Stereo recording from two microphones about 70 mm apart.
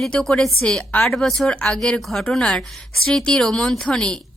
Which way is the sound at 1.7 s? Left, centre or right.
Centre.